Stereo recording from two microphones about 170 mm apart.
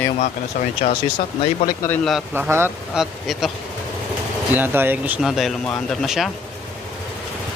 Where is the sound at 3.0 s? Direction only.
Centre (ahead or behind).